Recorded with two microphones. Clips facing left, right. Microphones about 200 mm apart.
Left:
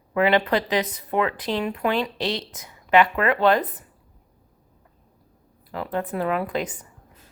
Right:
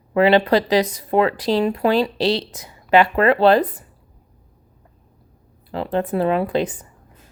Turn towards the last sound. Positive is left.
turn(degrees=-30)  # may be behind; listen again after turning